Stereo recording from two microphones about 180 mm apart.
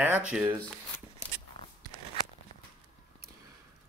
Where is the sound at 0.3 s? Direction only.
10° right (ahead or behind).